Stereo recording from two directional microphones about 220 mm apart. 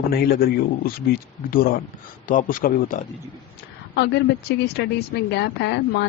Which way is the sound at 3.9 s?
50° left (ahead or behind).